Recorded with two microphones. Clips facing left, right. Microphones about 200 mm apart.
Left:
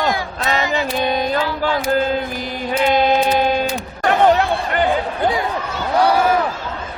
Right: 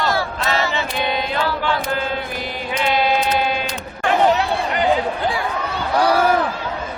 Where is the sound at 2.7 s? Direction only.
45° left (ahead or behind).